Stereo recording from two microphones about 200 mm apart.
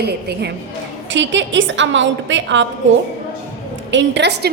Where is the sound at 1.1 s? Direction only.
65° right (ahead or behind).